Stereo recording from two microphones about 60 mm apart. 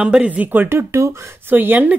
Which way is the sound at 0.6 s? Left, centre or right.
Right.